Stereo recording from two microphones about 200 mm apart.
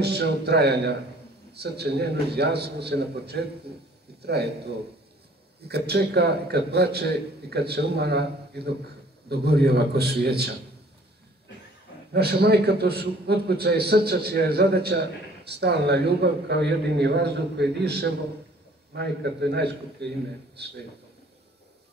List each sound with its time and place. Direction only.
0.0 s a man's voice: 55° right (ahead or behind)
12.1 s a man's voice: 55° right (ahead or behind)
18.9 s a man's voice: 55° right (ahead or behind)